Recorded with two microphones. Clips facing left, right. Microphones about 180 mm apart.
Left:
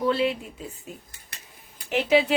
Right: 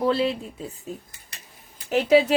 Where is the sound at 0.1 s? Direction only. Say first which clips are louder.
Left 2 dB; 35° right (ahead or behind).